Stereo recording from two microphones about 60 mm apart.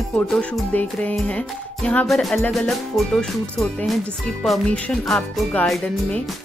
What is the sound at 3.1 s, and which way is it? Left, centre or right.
Speech, centre.